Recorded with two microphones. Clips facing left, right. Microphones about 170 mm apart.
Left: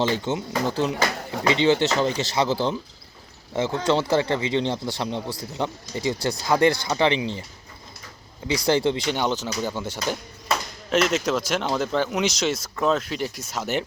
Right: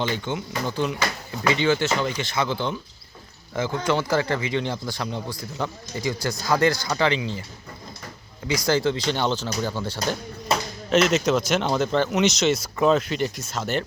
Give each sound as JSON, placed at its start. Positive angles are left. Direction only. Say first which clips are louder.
{"t": 0.0, "sound": "speech", "louder": "left 3 dB", "side_deg": 30}
{"t": 3.5, "sound": "speech", "louder": "left 2 dB", "side_deg": 25}
{"t": 8.4, "sound": "speech", "louder": "left 1 dB", "side_deg": 25}
{"t": 9.0, "sound": "speech", "louder": "even", "side_deg": 15}
{"t": 10.8, "sound": "speech", "louder": "right 2 dB", "side_deg": 0}
{"t": 13.5, "sound": "speech", "louder": "even", "side_deg": 15}